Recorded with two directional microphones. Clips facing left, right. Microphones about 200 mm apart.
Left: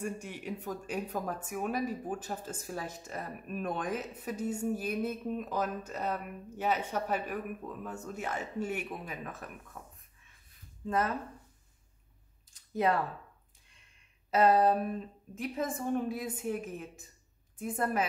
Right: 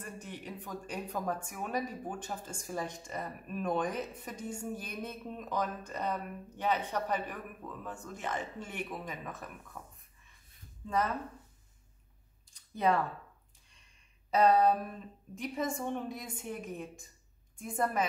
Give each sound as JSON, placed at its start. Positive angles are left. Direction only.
{"t": 0.0, "sound": "speech", "side_deg": 10}
{"t": 12.7, "sound": "a woman's voice", "side_deg": 0}
{"t": 14.3, "sound": "a woman's voice", "side_deg": 0}